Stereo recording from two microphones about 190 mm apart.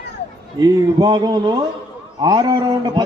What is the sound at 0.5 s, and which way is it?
A man's voice, 20° right (ahead or behind).